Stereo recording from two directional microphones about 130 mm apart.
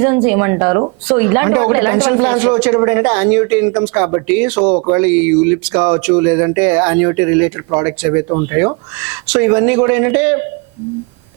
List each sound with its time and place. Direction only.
0.0 s a woman's voice: 20° right (ahead or behind)